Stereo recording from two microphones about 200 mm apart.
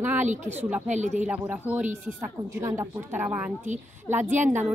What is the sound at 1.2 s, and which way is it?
Speech, 10° right (ahead or behind).